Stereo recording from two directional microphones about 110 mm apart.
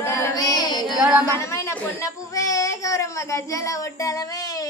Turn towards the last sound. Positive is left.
turn(degrees=35)  # may be behind; listen again after turning